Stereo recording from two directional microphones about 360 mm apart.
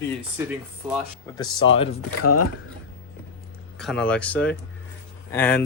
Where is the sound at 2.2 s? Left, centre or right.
Left.